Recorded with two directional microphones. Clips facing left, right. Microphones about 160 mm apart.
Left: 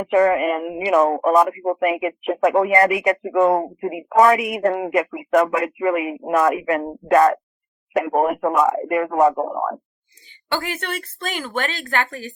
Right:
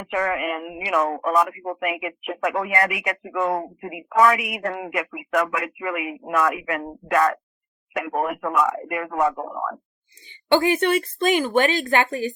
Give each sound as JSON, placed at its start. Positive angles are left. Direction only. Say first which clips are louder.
{"t": 0.0, "sound": "speech", "louder": "left 8 dB", "side_deg": 30}
{"t": 10.5, "sound": "speech", "louder": "right 8 dB", "side_deg": -15}